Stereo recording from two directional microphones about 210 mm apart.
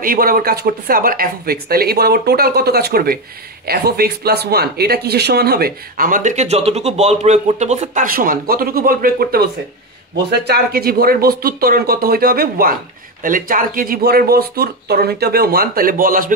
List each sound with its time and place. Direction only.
0.0 s speech: 45° right (ahead or behind)